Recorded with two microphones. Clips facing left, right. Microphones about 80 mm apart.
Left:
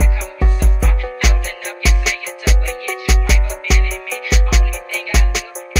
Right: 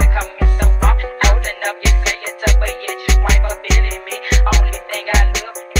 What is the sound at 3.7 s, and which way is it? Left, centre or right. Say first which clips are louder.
Music: even; right.